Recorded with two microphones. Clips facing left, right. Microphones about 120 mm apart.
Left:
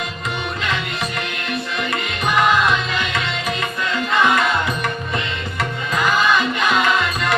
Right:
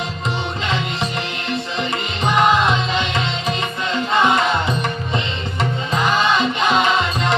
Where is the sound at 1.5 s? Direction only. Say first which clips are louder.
Right 1 dB; 25° right (ahead or behind).